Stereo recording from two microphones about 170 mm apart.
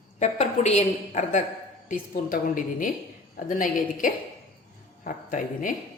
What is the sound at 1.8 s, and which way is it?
A woman's voice, 55° left (ahead or behind).